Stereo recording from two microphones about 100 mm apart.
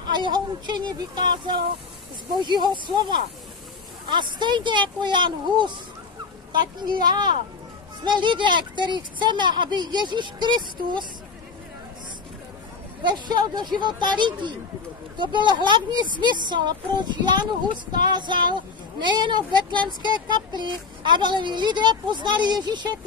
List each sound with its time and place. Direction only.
0.1 s speech: 50° right (ahead or behind)
13.0 s speech: 45° right (ahead or behind)